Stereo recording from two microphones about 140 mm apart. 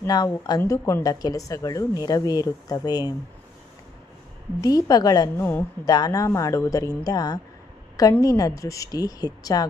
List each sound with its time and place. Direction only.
0.0 s speech: 25° left (ahead or behind)
4.6 s speech: 25° left (ahead or behind)